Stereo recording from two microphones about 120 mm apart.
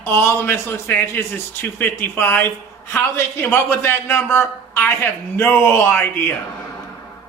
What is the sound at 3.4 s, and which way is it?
Speech, 15° left (ahead or behind).